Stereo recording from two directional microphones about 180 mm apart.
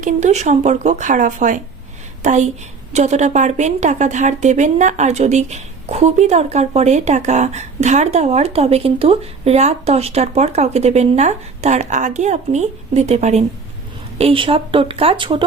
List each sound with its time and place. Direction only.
0.0 s a woman's voice: 40° right (ahead or behind)